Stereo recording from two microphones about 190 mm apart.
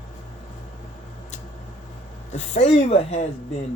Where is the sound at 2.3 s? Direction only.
35° left (ahead or behind).